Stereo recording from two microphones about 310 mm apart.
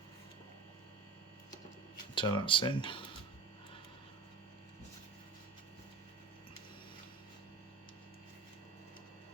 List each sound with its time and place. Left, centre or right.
2.1 s speech: centre